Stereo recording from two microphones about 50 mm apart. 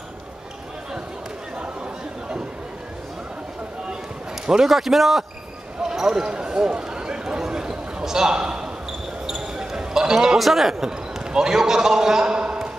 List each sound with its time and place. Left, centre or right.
4.5 s speech: centre
9.2 s basketball bounce: centre
10.4 s a man's voice: centre